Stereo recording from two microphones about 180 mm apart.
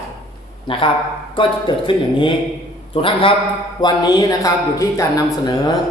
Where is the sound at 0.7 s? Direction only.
30° left (ahead or behind).